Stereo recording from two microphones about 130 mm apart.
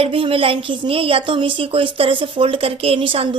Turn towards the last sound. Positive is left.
turn(degrees=-40)  # may be behind; listen again after turning